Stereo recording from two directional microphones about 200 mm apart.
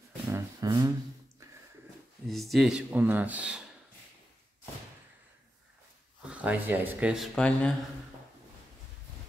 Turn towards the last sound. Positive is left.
turn(degrees=5)  # may be behind; listen again after turning